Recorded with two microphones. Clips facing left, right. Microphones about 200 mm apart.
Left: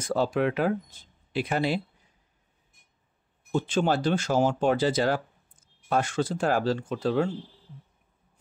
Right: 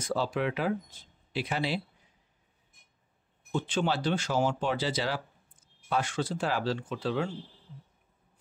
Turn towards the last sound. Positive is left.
turn(degrees=45)  # may be behind; listen again after turning